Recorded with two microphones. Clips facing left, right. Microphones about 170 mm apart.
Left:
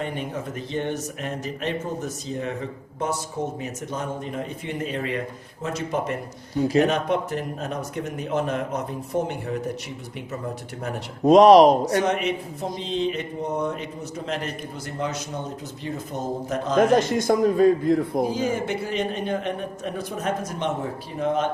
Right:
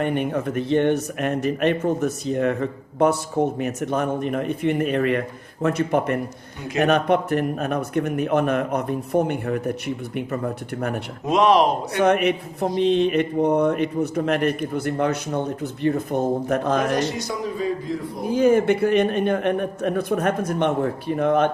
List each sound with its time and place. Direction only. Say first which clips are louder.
0.0 s speech: right 7 dB; 60° right (ahead or behind)
11.3 s speech: left 5 dB; 40° left (ahead or behind)
11.9 s speech: right 4 dB; 60° right (ahead or behind)
17.0 s a man's voice: left 5 dB; 50° left (ahead or behind)
18.3 s speech: right 8 dB; 60° right (ahead or behind)